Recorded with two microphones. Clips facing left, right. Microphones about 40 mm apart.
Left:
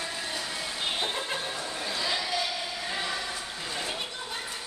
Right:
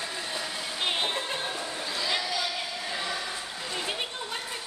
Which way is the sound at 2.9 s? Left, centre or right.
Centre.